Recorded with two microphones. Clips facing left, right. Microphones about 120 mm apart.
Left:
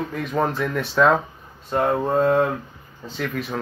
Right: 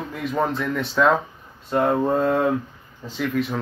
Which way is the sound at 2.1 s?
25° left (ahead or behind).